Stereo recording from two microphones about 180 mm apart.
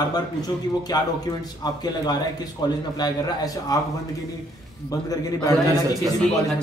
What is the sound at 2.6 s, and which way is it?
A man's voice, 20° left (ahead or behind).